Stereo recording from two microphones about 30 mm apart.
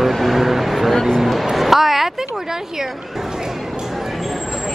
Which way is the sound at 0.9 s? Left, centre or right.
Centre.